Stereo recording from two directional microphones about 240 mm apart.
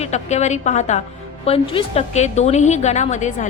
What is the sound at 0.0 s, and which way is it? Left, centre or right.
Speech, left.